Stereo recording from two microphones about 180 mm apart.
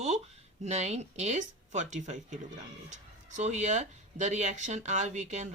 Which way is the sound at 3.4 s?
40° right (ahead or behind).